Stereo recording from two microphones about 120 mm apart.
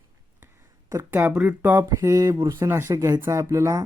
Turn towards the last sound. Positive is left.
turn(degrees=-25)  # may be behind; listen again after turning